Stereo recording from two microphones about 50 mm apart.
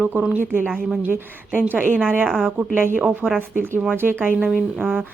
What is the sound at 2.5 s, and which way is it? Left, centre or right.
Speech, right.